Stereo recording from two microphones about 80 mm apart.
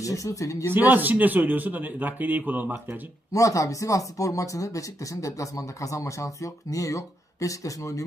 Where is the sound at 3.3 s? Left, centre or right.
Left.